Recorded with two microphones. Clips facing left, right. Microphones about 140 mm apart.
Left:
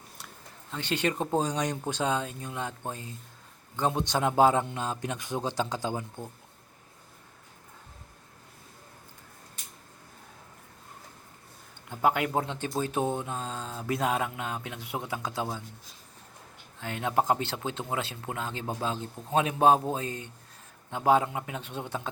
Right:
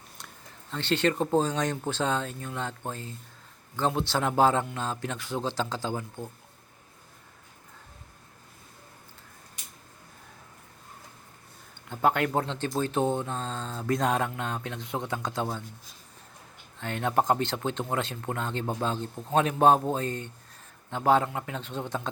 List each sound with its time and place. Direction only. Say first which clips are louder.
0.7 s speech: right 3 dB; 10° left (ahead or behind)
11.9 s speech: right 1 dB; 10° left (ahead or behind)
16.8 s a man's voice: right 1 dB; 10° left (ahead or behind)